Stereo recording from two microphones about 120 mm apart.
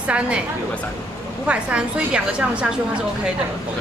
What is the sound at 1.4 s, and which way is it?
Speech, 10° right (ahead or behind).